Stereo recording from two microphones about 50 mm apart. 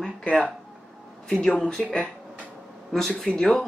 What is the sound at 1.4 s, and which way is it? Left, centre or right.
Speech, centre.